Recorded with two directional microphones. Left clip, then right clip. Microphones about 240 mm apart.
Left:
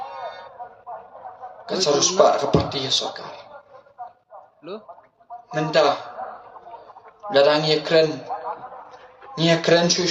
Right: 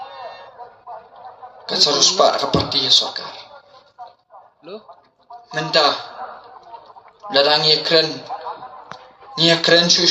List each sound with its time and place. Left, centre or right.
0.1 s alarm: left
1.6 s speech: centre
5.5 s speech: centre
7.3 s speech: centre
9.3 s speech: centre